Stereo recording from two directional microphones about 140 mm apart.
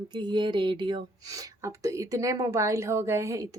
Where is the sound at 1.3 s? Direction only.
25° right (ahead or behind).